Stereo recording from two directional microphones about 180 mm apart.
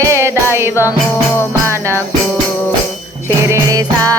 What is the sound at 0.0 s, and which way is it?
Music, 15° right (ahead or behind).